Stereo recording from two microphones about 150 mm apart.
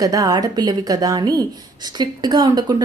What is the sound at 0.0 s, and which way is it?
A woman's voice, 25° right (ahead or behind).